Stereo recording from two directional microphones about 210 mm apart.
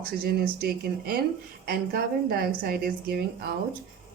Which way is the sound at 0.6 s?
45° right (ahead or behind).